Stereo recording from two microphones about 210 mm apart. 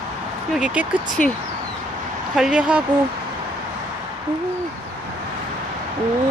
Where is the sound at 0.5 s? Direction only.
5° right (ahead or behind).